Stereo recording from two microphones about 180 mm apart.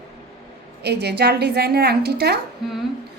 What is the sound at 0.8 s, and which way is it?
A woman's voice, 65° right (ahead or behind).